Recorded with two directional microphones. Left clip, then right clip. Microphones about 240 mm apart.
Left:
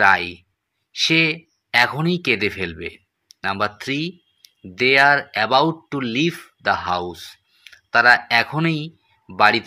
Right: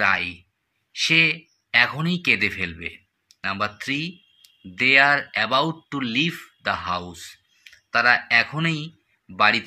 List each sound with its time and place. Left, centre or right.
0.0 s speech: centre